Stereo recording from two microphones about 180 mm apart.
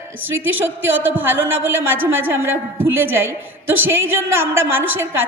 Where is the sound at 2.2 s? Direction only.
15° right (ahead or behind).